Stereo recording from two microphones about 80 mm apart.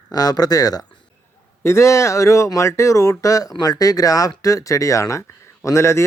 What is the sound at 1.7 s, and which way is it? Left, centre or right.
Speech, left.